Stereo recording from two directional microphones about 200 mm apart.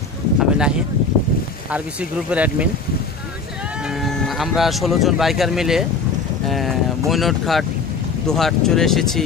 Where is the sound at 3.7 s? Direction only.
Centre (ahead or behind).